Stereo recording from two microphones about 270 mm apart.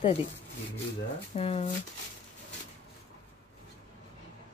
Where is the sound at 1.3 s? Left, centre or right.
Left.